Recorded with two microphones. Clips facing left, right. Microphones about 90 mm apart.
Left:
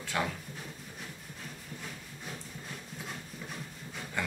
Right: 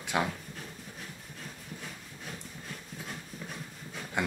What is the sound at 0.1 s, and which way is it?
Speech, 15° right (ahead or behind).